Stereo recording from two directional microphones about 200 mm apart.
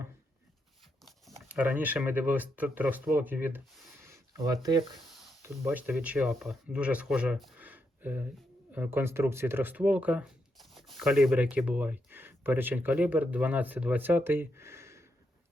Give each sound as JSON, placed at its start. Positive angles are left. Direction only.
{"t": 1.0, "sound": "speech", "side_deg": -5}
{"t": 4.0, "sound": "a sound", "side_deg": -15}
{"t": 5.4, "sound": "speech", "side_deg": -10}